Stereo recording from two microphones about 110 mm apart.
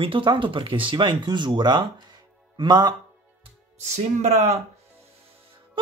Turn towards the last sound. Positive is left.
turn(degrees=-90)